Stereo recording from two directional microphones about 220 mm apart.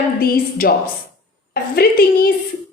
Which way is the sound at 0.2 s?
40° left (ahead or behind).